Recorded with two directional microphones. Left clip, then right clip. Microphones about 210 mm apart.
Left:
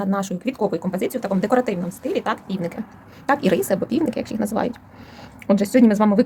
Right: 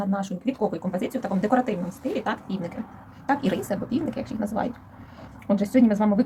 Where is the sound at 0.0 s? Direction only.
55° left (ahead or behind).